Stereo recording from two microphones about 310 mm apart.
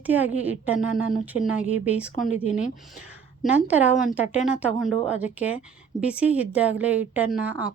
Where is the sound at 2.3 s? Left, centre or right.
Left.